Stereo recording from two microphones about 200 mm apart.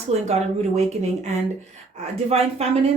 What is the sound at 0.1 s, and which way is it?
Speech, 35° right (ahead or behind).